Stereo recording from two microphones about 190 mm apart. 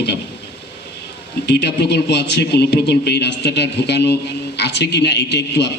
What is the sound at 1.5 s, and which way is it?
A man's voice, 65° left (ahead or behind).